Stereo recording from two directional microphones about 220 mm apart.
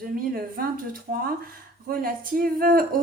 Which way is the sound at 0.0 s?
40° right (ahead or behind).